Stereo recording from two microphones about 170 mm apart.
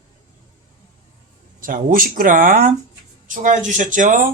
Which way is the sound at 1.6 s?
55° right (ahead or behind).